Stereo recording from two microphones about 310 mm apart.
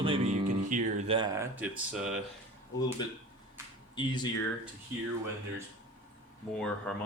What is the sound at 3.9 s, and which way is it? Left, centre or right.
Speech, centre.